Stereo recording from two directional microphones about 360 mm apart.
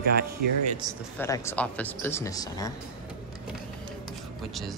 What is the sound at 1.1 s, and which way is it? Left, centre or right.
Speech, centre.